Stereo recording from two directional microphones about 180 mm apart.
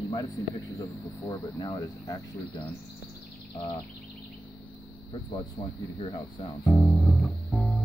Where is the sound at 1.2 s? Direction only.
20° left (ahead or behind).